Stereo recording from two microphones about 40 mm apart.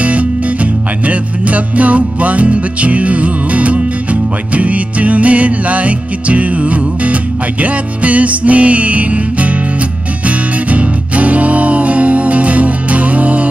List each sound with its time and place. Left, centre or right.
0.0 s music: right